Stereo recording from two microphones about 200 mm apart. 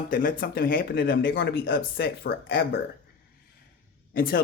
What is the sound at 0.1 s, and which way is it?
Speech, 45° left (ahead or behind).